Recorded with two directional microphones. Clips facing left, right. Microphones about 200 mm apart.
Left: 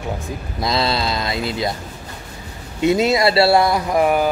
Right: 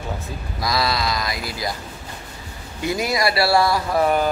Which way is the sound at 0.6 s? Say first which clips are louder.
Left 2 dB; 25° left (ahead or behind).